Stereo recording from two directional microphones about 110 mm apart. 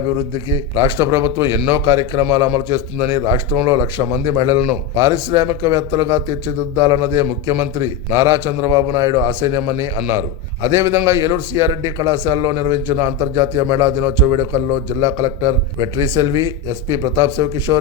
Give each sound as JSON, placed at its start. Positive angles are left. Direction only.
{"t": 0.8, "sound": "speech", "side_deg": -25}
{"t": 15.0, "sound": "speech", "side_deg": -25}